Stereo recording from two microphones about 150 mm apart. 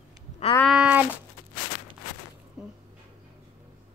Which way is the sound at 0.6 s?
5° right (ahead or behind).